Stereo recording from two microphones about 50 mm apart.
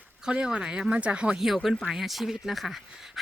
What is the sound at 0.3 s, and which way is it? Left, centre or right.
Speech, centre.